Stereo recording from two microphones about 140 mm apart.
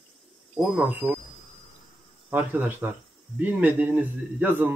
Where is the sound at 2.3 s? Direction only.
15° right (ahead or behind).